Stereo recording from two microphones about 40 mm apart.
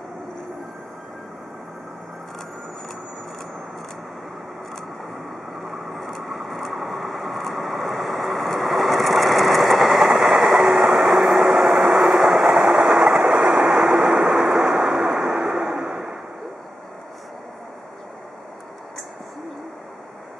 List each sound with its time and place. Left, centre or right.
5.7 s vehicle: centre